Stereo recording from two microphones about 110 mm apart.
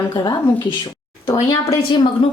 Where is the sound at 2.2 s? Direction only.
50° left (ahead or behind).